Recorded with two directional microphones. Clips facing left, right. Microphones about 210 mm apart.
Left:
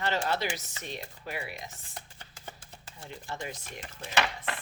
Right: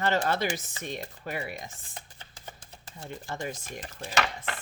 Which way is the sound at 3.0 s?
45° right (ahead or behind).